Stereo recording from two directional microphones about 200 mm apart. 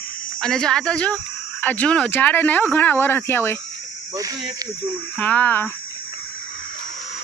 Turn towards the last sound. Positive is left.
turn(degrees=10)  # may be behind; listen again after turning